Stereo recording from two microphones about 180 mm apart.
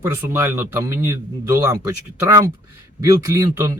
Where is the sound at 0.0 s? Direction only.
10° right (ahead or behind).